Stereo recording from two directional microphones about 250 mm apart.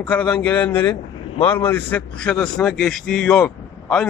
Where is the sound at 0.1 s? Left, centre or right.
Centre.